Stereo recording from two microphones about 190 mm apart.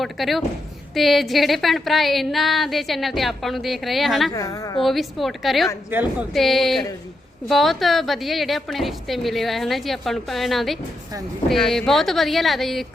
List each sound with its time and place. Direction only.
0.0 s speech: centre (ahead or behind)
4.4 s a woman's voice: 15° left (ahead or behind)
4.8 s speech: centre (ahead or behind)